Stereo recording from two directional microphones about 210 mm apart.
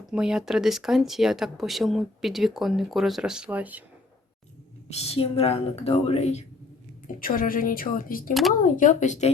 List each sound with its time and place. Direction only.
0.1 s speech: 5° right (ahead or behind)
4.9 s a woman's voice: 30° left (ahead or behind)
7.1 s speech: 40° left (ahead or behind)
8.3 s speech: centre (ahead or behind)
8.6 s speech: 35° left (ahead or behind)